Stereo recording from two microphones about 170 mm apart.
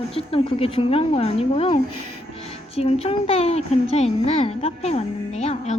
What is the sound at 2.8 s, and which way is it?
A woman's voice, 35° left (ahead or behind).